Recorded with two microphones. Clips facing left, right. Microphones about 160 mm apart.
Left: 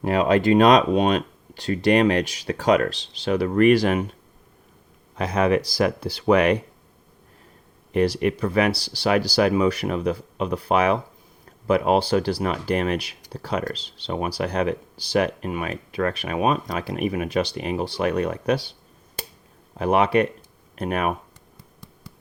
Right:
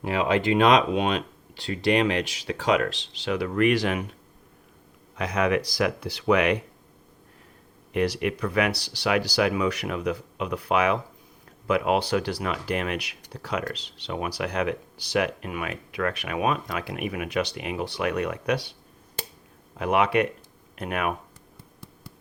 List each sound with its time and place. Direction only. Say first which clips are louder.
0.0 s speech: left 5 dB; 45° left (ahead or behind)
5.1 s speech: left 4 dB; 30° left (ahead or behind)
7.9 s speech: left 4 dB; 35° left (ahead or behind)
19.7 s speech: left 3 dB; 35° left (ahead or behind)